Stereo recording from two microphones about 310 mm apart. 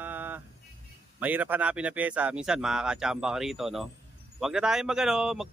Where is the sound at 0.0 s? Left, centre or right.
Centre.